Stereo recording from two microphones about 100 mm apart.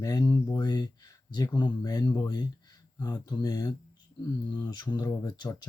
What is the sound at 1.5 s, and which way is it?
Speech, 45° left (ahead or behind).